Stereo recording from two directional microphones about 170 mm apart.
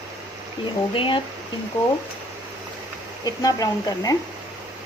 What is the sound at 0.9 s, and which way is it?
Speech, 30° left (ahead or behind).